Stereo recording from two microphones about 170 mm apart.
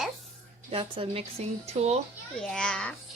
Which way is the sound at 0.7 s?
35° right (ahead or behind).